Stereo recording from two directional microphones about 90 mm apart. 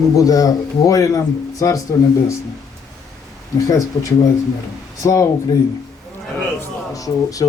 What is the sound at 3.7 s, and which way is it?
Speech, 35° left (ahead or behind).